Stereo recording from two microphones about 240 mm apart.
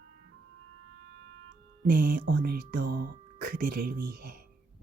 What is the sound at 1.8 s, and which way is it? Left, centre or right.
Speech, right.